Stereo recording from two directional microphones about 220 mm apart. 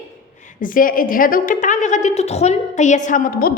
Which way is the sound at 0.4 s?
40° left (ahead or behind).